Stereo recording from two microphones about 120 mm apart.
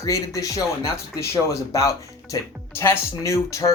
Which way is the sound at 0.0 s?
25° left (ahead or behind).